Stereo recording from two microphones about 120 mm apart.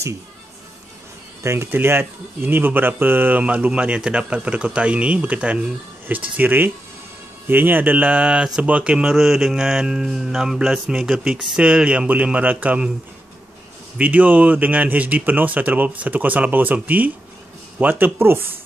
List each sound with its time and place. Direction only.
1.4 s speech: 20° right (ahead or behind)
13.9 s speech: 10° right (ahead or behind)